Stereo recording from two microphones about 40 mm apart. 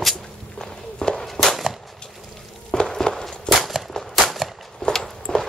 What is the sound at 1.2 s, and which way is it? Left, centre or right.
Walk, centre.